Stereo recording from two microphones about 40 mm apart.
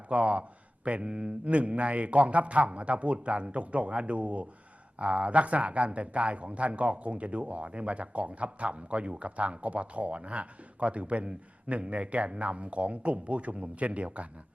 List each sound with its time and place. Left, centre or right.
0.1 s speech: right